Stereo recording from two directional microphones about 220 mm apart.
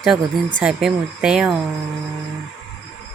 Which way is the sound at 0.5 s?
5° right (ahead or behind).